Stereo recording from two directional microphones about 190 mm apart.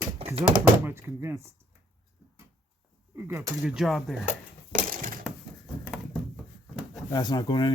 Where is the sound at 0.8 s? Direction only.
10° right (ahead or behind).